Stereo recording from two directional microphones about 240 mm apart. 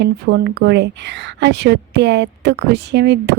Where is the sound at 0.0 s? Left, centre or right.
Right.